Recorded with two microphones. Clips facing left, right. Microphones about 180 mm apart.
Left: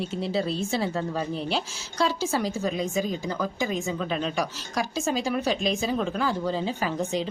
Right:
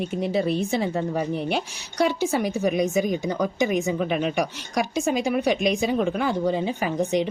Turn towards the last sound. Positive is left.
turn(degrees=-20)  # may be behind; listen again after turning